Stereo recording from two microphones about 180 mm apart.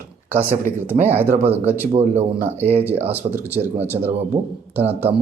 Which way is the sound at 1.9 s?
35° right (ahead or behind).